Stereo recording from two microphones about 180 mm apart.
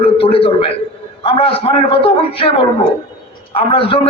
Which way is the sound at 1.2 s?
30° left (ahead or behind).